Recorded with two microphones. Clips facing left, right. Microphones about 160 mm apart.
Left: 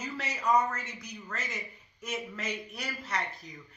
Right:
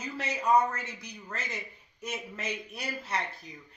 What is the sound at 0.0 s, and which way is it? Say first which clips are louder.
A man's voice: right 1 dB; 30° right (ahead or behind).